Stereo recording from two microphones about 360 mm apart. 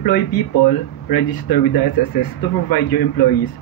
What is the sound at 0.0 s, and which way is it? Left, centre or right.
Speech, left.